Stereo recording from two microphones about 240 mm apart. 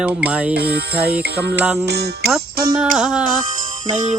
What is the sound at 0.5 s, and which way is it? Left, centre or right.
Music, right.